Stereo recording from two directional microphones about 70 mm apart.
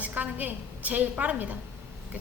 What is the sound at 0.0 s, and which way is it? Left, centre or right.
A woman's voice, right.